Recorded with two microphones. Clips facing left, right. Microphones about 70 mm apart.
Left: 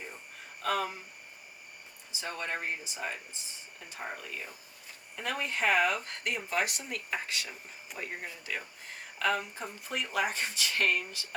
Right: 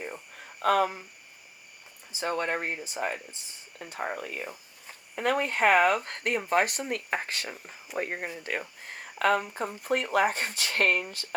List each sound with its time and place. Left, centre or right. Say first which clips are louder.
0.6 s speech: right 8 dB; right
2.1 s speech: right 7 dB; right